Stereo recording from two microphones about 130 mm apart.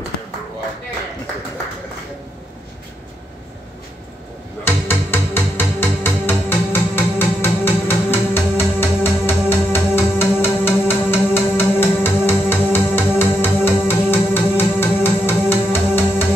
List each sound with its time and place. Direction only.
4.6 s music: 20° left (ahead or behind)